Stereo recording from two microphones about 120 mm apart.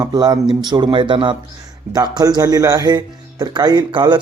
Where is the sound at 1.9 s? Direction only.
30° right (ahead or behind).